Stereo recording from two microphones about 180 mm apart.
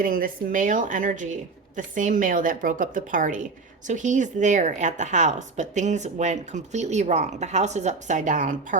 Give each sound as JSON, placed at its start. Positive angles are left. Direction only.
{"t": 0.0, "sound": "a woman's voice", "side_deg": -55}